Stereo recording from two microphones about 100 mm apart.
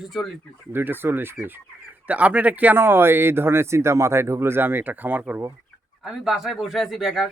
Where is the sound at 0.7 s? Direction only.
20° right (ahead or behind).